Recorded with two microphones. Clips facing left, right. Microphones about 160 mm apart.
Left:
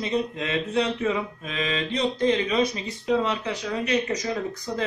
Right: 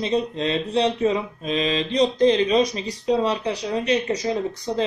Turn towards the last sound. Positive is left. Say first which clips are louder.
# right 4 dB
turn(degrees=-30)  # may be behind; listen again after turning